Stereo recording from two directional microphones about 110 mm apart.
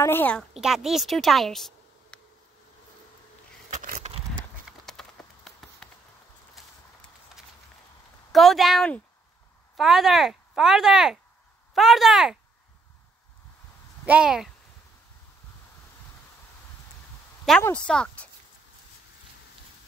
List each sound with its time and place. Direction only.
0.0 s a woman's voice: 20° left (ahead or behind)
0.6 s speech: 5° right (ahead or behind)
4.1 s a sound: 75° right (ahead or behind)
4.8 s a sound: 5° left (ahead or behind)
6.6 s horse: centre (ahead or behind)
8.3 s speech: centre (ahead or behind)
14.0 s speech: 10° right (ahead or behind)
17.6 s speech: 10° left (ahead or behind)